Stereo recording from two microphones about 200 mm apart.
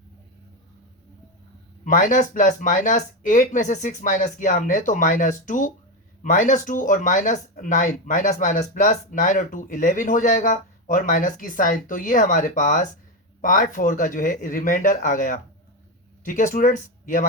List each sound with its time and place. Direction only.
1.8 s speech: 40° left (ahead or behind)